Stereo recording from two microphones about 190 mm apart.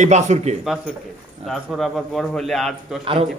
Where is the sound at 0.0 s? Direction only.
40° right (ahead or behind).